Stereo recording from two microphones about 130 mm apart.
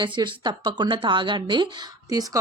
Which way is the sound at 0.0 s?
40° right (ahead or behind).